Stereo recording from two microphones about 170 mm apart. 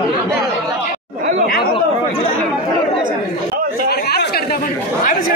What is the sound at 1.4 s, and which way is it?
Chatter, 60° left (ahead or behind).